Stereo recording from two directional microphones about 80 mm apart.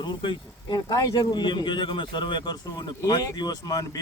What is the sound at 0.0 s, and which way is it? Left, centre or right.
Speech, left.